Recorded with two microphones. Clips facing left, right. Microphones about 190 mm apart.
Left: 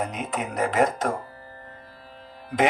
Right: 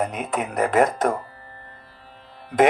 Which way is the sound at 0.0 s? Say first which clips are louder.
Right 3 dB; 55° right (ahead or behind).